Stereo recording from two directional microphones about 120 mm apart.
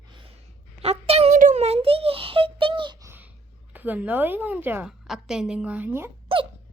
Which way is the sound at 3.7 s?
15° right (ahead or behind).